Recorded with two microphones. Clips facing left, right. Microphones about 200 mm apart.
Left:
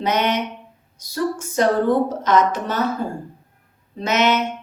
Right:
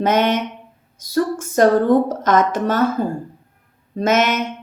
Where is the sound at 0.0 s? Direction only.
50° right (ahead or behind).